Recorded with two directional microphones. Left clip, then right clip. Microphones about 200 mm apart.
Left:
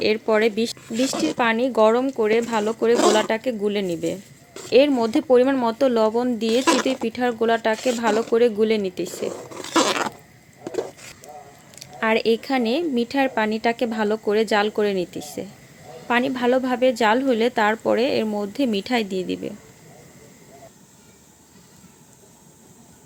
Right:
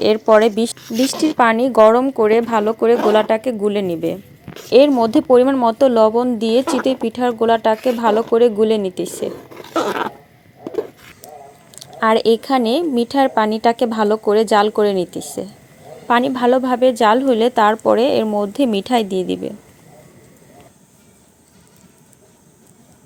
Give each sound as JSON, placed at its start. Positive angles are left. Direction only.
{"t": 0.0, "sound": "a woman's voice", "side_deg": -20}
{"t": 11.7, "sound": "a woman's voice", "side_deg": -15}